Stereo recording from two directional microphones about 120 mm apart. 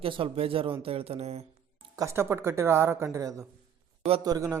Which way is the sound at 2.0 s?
20° right (ahead or behind).